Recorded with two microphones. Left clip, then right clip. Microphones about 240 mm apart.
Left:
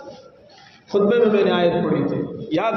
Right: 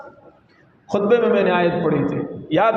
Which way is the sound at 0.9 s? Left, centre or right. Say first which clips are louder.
Even; right.